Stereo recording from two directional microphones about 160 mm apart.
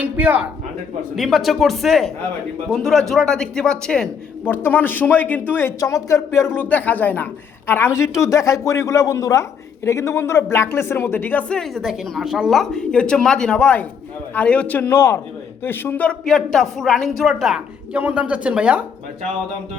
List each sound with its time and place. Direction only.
0.0 s a woman's voice: 10° right (ahead or behind)